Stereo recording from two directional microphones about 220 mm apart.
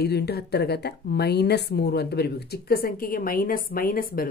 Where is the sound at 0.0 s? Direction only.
45° left (ahead or behind).